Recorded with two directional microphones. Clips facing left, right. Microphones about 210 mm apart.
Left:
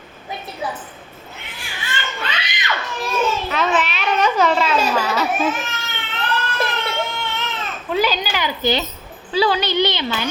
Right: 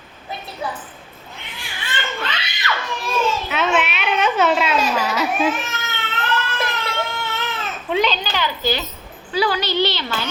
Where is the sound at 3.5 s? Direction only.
Centre (ahead or behind).